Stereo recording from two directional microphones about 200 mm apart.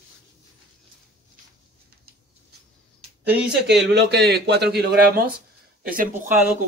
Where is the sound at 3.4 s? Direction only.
60° right (ahead or behind).